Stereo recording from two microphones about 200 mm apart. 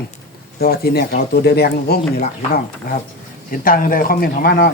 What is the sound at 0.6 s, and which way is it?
Speech, 50° left (ahead or behind).